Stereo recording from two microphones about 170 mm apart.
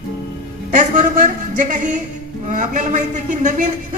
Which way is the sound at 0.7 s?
50° right (ahead or behind).